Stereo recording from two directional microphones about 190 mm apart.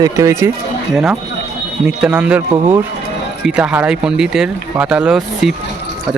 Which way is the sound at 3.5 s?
5° right (ahead or behind).